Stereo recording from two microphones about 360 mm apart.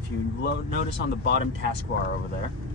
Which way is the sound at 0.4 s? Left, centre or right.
Left.